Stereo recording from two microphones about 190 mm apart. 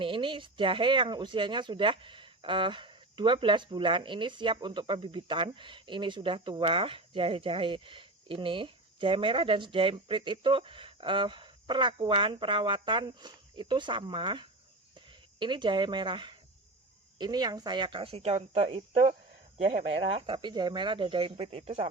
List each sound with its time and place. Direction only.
0.0 s speech: 25° right (ahead or behind)